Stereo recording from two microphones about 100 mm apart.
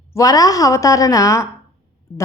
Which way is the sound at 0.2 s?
35° left (ahead or behind).